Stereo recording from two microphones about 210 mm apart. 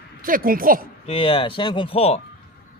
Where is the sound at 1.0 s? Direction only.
25° left (ahead or behind).